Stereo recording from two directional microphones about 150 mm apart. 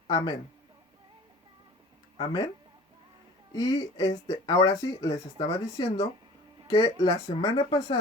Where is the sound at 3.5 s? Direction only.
25° left (ahead or behind).